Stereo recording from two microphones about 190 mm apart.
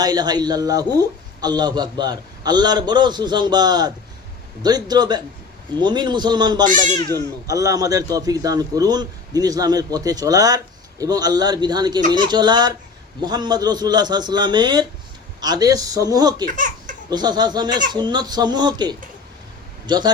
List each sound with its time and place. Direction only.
0.0 s a man's voice: 20° right (ahead or behind)
16.5 s speech: 45° right (ahead or behind)
17.1 s a man's voice: 20° right (ahead or behind)